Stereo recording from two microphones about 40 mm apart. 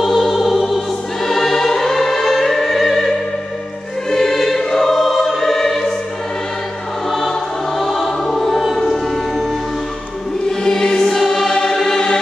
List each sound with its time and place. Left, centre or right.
0.0 s music: centre
1.2 s music: centre
4.1 s music: centre
4.6 s choir: centre
7.2 s choir: centre
8.7 s music: centre
10.6 s music: centre
11.1 s music: centre
11.5 s choir: centre